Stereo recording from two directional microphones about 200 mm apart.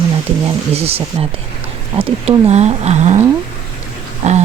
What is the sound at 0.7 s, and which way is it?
Speech, 30° right (ahead or behind).